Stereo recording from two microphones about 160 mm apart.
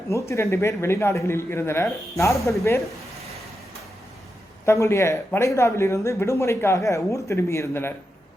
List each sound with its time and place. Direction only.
0.1 s speech: 20° left (ahead or behind)
4.6 s speech: 15° left (ahead or behind)